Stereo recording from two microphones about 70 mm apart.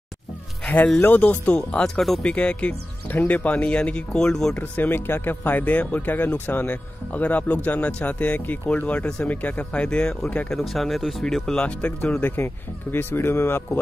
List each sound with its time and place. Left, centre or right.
1.0 s speech: left
1.6 s speech: centre
4.6 s speech: left; by 11.7 s centre
12.2 s speech: left